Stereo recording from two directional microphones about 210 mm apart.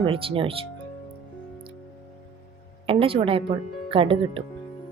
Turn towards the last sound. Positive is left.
turn(degrees=-25)  # may be behind; listen again after turning